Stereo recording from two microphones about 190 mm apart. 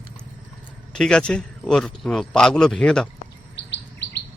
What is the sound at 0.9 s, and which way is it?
Speech, 5° left (ahead or behind).